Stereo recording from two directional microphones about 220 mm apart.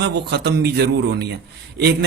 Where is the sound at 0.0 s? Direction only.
50° right (ahead or behind).